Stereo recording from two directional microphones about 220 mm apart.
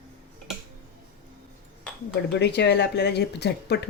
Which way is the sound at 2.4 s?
50° left (ahead or behind).